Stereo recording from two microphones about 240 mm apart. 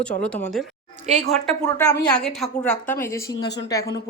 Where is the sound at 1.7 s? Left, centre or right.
Centre.